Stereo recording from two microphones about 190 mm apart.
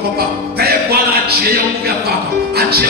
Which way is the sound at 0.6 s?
55° right (ahead or behind).